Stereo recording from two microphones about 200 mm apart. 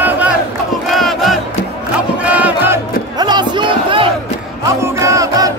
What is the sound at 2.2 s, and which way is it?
Music, 5° right (ahead or behind).